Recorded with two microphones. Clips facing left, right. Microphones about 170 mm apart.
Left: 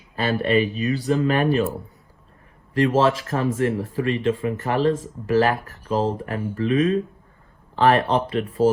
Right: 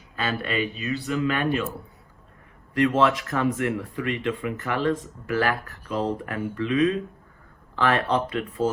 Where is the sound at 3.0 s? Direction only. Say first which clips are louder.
Left 1 dB; 30° left (ahead or behind).